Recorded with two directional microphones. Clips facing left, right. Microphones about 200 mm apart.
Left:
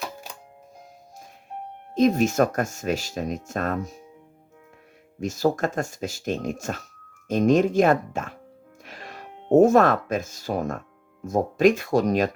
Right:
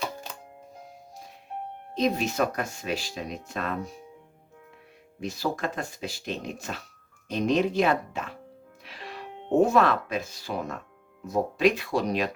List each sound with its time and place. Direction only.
0.0 s music: 5° left (ahead or behind)
2.0 s speech: 45° left (ahead or behind)
5.2 s speech: 45° left (ahead or behind)